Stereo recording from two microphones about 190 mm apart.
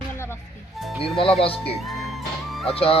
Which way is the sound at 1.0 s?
30° left (ahead or behind).